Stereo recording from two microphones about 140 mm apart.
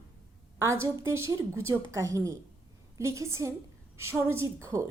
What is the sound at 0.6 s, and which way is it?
A woman's voice, 20° right (ahead or behind).